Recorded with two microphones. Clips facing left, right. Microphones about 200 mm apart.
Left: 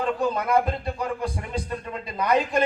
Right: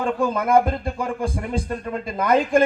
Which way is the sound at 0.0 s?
50° right (ahead or behind).